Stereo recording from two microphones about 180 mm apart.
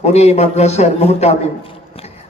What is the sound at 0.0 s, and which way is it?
A man's voice, 35° left (ahead or behind).